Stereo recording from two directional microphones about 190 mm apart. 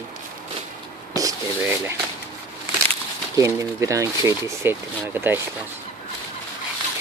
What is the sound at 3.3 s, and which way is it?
Speech, 15° right (ahead or behind).